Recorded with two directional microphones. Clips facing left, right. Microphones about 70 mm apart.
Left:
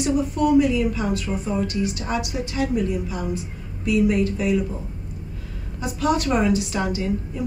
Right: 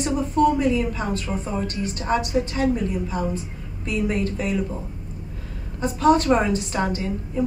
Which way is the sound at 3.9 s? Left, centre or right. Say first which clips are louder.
Left 4 dB; right.